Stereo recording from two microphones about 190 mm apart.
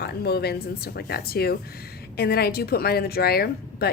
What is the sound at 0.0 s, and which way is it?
A woman's voice, 55° left (ahead or behind).